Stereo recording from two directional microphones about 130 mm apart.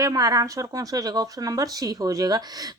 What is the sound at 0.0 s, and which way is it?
Speech, 30° right (ahead or behind).